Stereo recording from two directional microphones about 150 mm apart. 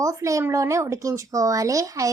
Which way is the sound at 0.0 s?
20° right (ahead or behind).